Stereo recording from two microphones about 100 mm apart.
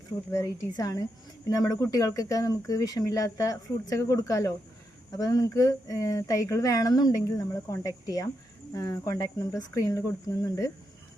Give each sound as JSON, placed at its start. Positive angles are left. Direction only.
{"t": 0.3, "sound": "speech", "side_deg": 30}